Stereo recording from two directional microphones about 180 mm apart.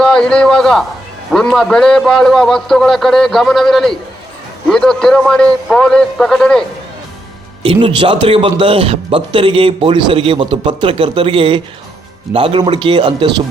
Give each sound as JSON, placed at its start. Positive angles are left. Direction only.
{"t": 0.0, "sound": "a man's voice", "side_deg": 5}
{"t": 7.6, "sound": "speech", "side_deg": -30}